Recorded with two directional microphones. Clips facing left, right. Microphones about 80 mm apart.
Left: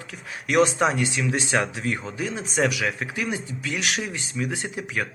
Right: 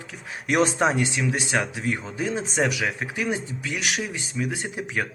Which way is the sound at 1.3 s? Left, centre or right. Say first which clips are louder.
Left 1 dB; centre.